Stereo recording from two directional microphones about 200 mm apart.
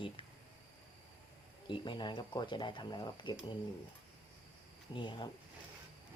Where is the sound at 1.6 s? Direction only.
25° left (ahead or behind).